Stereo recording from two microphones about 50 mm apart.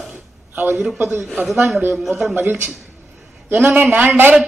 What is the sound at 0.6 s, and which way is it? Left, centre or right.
A woman's voice, right.